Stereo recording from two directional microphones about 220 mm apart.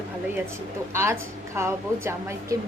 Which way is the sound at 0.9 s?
10° right (ahead or behind).